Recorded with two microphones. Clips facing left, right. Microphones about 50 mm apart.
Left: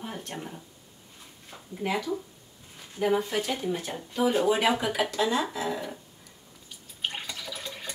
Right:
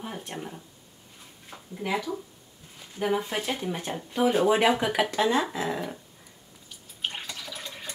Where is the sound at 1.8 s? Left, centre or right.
Centre.